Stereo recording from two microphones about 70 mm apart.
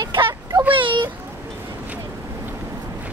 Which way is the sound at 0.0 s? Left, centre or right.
Right.